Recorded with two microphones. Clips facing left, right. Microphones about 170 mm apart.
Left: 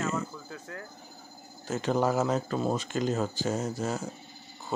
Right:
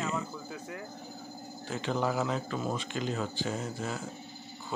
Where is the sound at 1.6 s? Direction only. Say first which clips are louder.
Left 4 dB; 45° left (ahead or behind).